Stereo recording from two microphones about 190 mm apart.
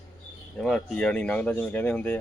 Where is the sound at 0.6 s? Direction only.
5° left (ahead or behind).